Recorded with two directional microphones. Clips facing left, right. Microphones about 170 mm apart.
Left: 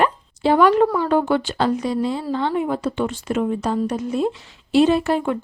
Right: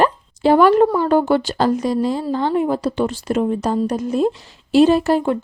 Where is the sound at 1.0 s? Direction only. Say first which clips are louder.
Right 3 dB; 40° right (ahead or behind).